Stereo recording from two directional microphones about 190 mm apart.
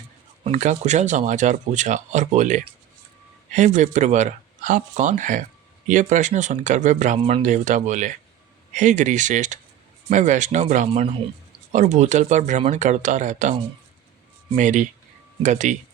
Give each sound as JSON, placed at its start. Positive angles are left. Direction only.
{"t": 0.4, "sound": "speech", "side_deg": -40}